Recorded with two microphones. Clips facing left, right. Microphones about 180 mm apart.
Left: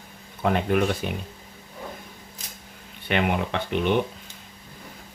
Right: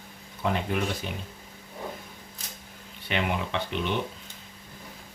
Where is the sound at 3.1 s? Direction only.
55° left (ahead or behind).